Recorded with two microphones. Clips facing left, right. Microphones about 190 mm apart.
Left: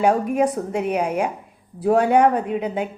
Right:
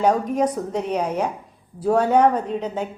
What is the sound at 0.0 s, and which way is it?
A woman's voice, 10° left (ahead or behind).